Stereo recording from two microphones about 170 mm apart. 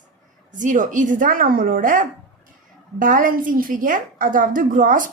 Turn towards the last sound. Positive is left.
turn(degrees=-50)  # may be behind; listen again after turning